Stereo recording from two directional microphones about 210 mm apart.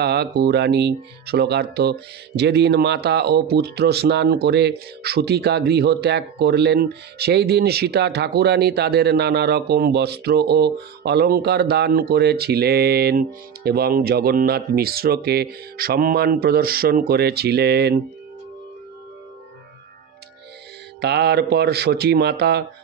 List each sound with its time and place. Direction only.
0.0 s speech: 50° right (ahead or behind)
21.0 s speech: 50° right (ahead or behind)